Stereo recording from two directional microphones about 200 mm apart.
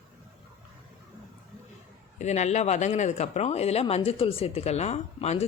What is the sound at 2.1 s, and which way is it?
Speech, 35° left (ahead or behind).